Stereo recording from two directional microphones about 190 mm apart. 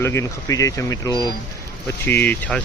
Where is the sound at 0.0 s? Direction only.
15° left (ahead or behind).